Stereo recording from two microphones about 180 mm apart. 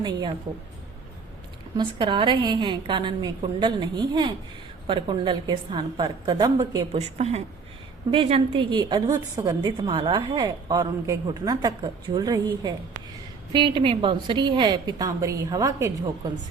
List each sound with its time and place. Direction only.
1.7 s a woman's voice: 25° right (ahead or behind)
7.2 s a woman's voice: 35° right (ahead or behind); by 12.4 s 20° right (ahead or behind)
13.5 s a woman's voice: 25° right (ahead or behind)